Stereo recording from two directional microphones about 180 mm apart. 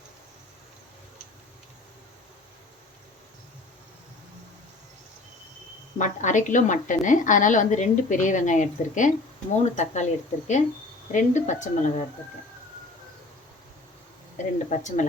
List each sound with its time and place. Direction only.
6.0 s a woman's voice: 45° left (ahead or behind)
14.3 s a woman's voice: 45° left (ahead or behind)